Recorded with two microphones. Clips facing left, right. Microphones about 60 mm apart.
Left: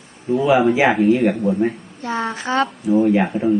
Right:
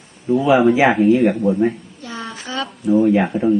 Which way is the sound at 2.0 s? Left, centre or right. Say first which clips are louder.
Left 7 dB; left.